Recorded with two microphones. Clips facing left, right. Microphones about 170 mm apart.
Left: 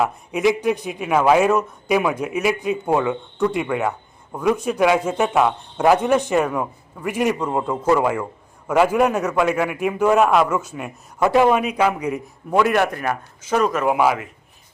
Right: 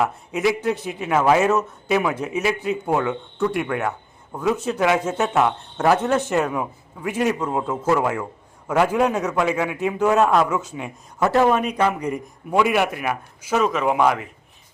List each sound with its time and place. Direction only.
0.0 s a man's voice: 15° left (ahead or behind)